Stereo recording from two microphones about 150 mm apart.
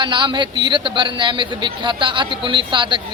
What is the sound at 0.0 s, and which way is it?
Speech, 30° right (ahead or behind).